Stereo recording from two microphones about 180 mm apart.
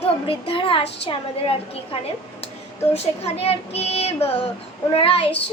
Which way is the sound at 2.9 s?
35° left (ahead or behind).